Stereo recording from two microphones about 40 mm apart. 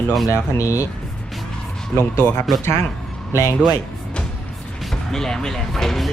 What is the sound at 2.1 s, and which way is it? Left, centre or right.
Speech, left.